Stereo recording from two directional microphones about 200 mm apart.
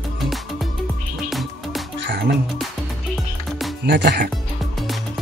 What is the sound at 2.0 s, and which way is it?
Music, 60° right (ahead or behind).